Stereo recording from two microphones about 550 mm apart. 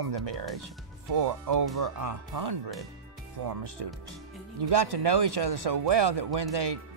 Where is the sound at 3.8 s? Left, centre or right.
Right.